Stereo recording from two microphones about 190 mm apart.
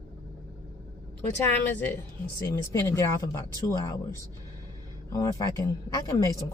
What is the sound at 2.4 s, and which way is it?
A woman's voice, 15° left (ahead or behind).